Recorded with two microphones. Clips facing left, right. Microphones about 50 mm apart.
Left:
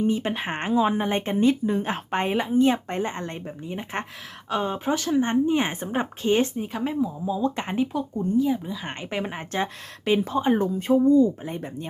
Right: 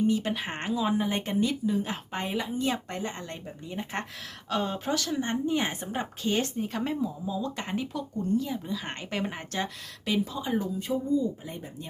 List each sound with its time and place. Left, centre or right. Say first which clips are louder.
0.0 s speech: left 2 dB; left
6.6 s speech: left 3 dB; centre
7.3 s speech: left 6 dB; left
10.1 s speech: left 7 dB; left